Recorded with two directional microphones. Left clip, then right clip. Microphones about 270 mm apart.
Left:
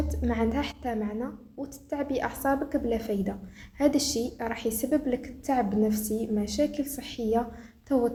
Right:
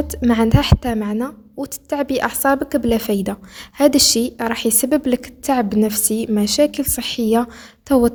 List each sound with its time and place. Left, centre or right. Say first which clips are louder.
0.1 s a woman's voice: right 11 dB; right